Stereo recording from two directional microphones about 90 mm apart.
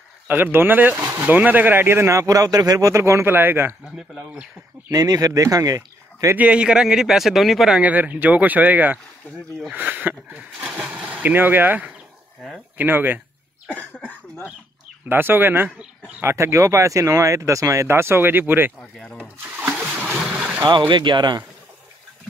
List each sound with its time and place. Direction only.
0.3 s a man's voice: 25° right (ahead or behind)
3.8 s speech: 5° right (ahead or behind)
4.8 s speech: 45° right (ahead or behind)
6.3 s speech: 15° right (ahead or behind)
7.8 s a man's voice: 20° right (ahead or behind)
13.7 s cough: 15° left (ahead or behind)
15.0 s a man's voice: 25° right (ahead or behind)
18.8 s cough: 10° left (ahead or behind)
19.2 s splash: 20° right (ahead or behind)
20.6 s speech: 60° right (ahead or behind)